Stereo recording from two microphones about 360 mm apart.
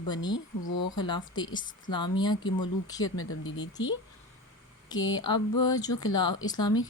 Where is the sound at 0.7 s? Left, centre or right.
Left.